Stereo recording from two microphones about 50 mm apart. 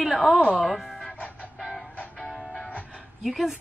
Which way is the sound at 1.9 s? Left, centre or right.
Left.